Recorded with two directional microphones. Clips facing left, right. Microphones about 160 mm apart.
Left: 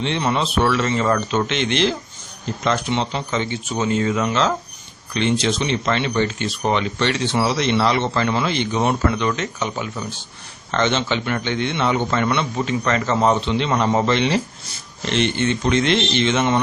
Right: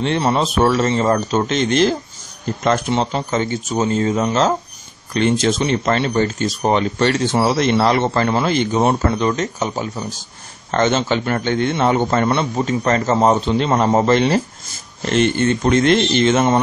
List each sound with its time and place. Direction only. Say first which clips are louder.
0.0 s a man's voice: right 4 dB; 40° right (ahead or behind)